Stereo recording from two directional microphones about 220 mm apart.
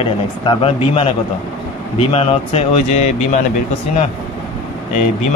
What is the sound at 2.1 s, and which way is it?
Speech, 30° left (ahead or behind).